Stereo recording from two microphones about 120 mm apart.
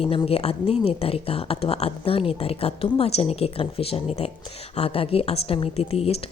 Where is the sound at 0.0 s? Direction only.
50° left (ahead or behind).